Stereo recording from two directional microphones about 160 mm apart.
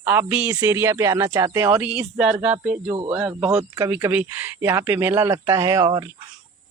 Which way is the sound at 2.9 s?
25° right (ahead or behind).